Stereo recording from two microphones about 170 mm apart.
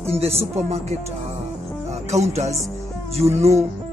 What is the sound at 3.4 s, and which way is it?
Speech, 40° right (ahead or behind).